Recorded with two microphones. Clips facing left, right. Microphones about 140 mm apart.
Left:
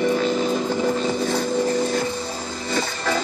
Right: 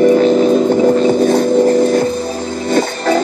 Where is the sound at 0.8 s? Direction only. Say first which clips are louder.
Right 11 dB; 60° right (ahead or behind).